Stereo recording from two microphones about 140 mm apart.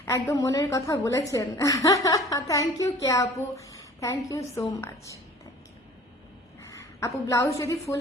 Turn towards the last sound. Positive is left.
turn(degrees=20)  # may be behind; listen again after turning